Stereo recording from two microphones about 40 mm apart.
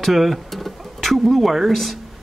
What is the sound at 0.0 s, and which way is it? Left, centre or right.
Speech, centre.